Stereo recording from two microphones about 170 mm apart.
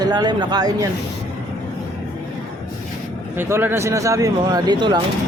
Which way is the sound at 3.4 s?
15° right (ahead or behind).